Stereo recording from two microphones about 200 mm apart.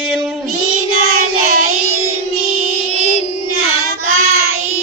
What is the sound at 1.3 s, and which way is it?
Child singing, 90° right.